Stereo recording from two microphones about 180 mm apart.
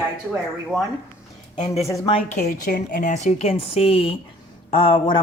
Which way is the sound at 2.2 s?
50° left (ahead or behind).